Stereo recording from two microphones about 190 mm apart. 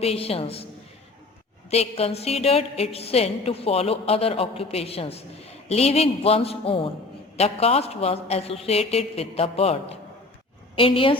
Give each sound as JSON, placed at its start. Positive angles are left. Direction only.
{"t": 0.0, "sound": "a woman's voice", "side_deg": 30}
{"t": 1.7, "sound": "a woman's voice", "side_deg": 35}